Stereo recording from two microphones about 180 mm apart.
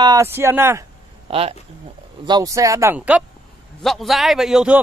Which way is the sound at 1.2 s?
30° right (ahead or behind).